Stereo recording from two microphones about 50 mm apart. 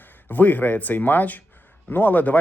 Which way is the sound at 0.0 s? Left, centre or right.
Left.